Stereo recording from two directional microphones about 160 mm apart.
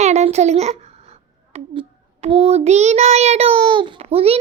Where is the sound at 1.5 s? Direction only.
40° right (ahead or behind).